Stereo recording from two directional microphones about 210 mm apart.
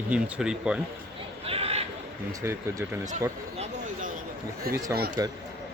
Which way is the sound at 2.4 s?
10° right (ahead or behind).